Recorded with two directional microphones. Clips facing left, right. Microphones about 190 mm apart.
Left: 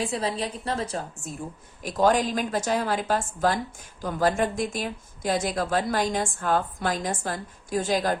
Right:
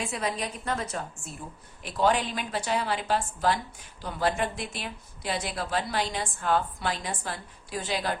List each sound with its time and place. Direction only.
0.0 s a woman's voice: 30° left (ahead or behind)